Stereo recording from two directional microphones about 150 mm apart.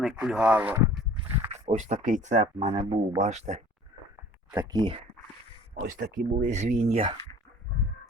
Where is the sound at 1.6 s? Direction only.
50° right (ahead or behind).